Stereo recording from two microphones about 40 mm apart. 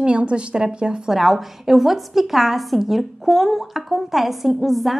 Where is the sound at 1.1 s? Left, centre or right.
Centre.